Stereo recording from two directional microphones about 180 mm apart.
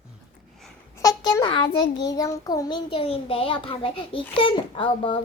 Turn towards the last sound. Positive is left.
turn(degrees=30)  # may be behind; listen again after turning